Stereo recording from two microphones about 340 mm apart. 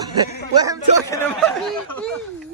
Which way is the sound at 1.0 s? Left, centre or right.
Centre.